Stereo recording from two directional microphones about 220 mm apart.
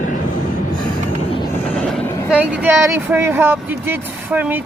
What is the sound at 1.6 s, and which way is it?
Vehicle, 5° left (ahead or behind).